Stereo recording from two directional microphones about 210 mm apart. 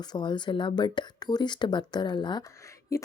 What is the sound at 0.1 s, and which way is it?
A woman's voice, 20° left (ahead or behind).